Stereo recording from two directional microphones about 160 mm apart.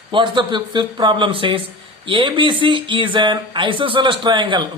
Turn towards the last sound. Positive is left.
turn(degrees=-30)  # may be behind; listen again after turning